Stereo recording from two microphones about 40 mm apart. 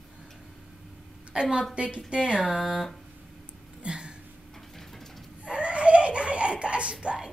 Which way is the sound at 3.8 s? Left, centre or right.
Right.